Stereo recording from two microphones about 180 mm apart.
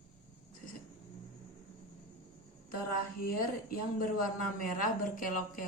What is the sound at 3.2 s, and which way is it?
Speech, 50° left (ahead or behind).